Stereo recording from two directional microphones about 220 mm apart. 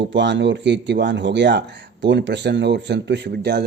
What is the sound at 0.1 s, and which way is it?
Speech, 55° right (ahead or behind).